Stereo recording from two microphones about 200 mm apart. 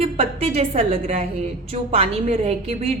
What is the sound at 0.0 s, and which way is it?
A woman's voice, 30° right (ahead or behind).